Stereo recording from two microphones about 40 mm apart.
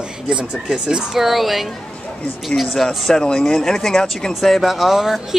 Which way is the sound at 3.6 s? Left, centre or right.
Centre.